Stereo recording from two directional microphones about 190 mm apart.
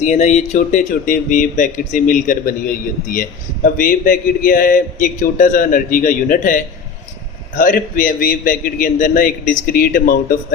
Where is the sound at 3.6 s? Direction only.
45° left (ahead or behind).